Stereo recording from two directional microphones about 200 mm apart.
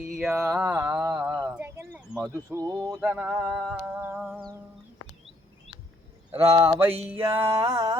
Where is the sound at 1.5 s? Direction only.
10° right (ahead or behind).